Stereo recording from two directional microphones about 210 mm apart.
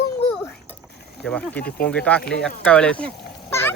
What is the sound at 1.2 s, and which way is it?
Speech, 5° left (ahead or behind).